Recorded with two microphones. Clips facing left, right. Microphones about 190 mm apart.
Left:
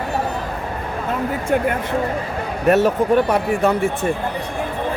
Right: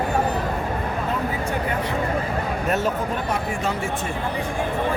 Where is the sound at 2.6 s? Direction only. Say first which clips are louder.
Left 11 dB; 65° left (ahead or behind).